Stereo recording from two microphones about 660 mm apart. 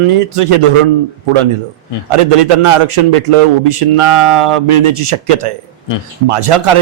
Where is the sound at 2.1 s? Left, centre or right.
Right.